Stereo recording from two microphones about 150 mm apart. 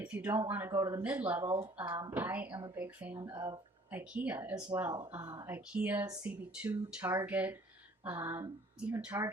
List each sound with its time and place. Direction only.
0.0 s speech: 10° right (ahead or behind)
1.5 s speech: 35° right (ahead or behind)
1.8 s speech: 15° right (ahead or behind)
3.2 s speech: 25° right (ahead or behind)
3.9 s speech: 10° right (ahead or behind)